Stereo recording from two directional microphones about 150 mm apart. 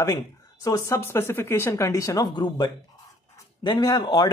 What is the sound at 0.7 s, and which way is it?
Speech, 20° left (ahead or behind).